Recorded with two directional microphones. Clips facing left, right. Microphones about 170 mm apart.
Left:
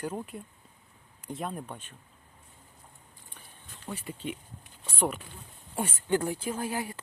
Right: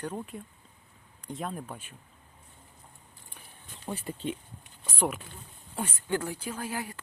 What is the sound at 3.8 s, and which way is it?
Speech, 30° right (ahead or behind).